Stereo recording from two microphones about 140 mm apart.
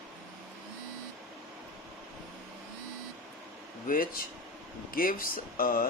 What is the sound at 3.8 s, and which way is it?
Speech, 85° left.